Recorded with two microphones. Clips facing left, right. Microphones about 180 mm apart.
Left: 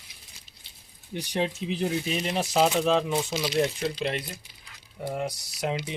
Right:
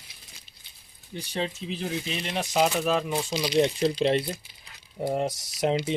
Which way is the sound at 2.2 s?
Centre (ahead or behind).